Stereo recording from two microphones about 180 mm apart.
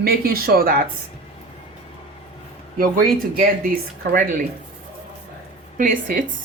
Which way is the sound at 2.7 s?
50° right (ahead or behind).